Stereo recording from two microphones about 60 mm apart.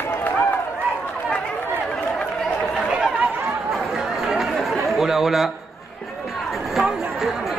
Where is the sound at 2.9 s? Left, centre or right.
Centre.